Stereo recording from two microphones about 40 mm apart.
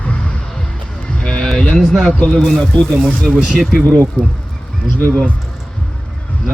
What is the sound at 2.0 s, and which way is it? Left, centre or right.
Speech, left.